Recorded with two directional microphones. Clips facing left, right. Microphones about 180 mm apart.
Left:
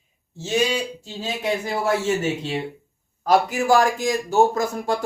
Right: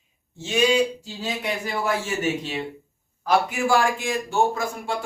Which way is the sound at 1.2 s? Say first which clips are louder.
Left 3 dB; 25° left (ahead or behind).